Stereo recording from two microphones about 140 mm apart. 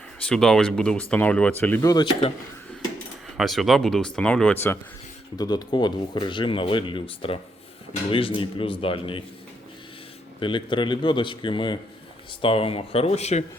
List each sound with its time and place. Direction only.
0.3 s speech: 5° left (ahead or behind)
1.8 s speech: 25° left (ahead or behind)
3.3 s speech: centre (ahead or behind); by 4.8 s 15° left (ahead or behind)
5.4 s speech: 30° left (ahead or behind)
10.4 s speech: 35° left (ahead or behind)